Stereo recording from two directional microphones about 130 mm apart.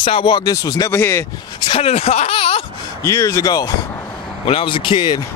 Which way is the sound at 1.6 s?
40° left (ahead or behind).